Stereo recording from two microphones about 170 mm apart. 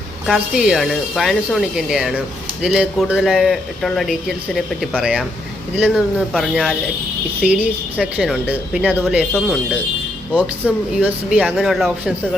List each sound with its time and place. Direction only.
0.3 s speech: 5° right (ahead or behind)